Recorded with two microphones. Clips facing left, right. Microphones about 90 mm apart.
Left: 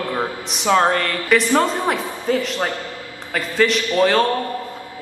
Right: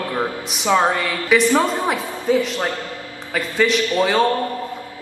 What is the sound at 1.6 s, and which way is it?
A man's voice, centre (ahead or behind).